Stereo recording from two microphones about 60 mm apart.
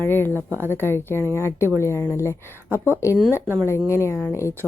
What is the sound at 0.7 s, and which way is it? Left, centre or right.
A woman's voice, left.